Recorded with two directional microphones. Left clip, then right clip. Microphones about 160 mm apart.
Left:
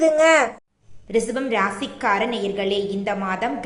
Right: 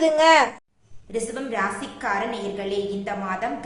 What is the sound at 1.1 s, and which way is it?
A woman's voice, 25° left (ahead or behind).